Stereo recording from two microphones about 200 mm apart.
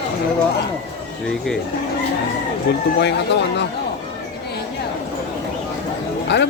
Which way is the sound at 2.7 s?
55° left (ahead or behind).